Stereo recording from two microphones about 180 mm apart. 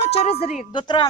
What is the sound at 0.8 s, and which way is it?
Speech, 25° left (ahead or behind).